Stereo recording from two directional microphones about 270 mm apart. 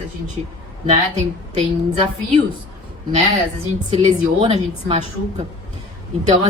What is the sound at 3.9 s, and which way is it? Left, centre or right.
A woman's voice, right.